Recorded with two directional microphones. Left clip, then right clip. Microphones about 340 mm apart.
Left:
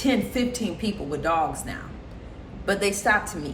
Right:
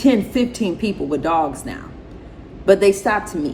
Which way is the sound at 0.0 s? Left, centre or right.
Centre.